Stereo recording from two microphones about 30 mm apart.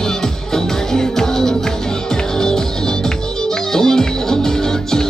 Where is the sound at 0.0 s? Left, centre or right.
Centre.